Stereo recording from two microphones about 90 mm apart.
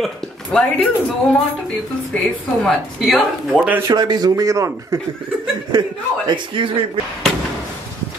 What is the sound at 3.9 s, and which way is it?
Speech, 50° right (ahead or behind).